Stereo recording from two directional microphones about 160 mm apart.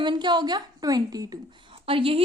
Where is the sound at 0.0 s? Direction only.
30° right (ahead or behind).